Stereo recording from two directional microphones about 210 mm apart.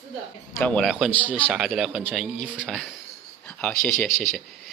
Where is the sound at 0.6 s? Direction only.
5° left (ahead or behind).